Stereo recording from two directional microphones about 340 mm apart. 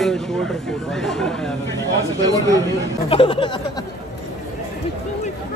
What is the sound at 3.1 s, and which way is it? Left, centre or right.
Speech, centre.